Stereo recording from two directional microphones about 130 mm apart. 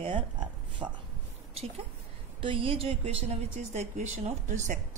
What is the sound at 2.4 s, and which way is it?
A woman's voice, 45° right (ahead or behind).